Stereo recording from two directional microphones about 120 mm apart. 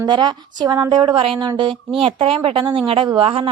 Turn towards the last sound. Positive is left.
turn(degrees=-50)  # may be behind; listen again after turning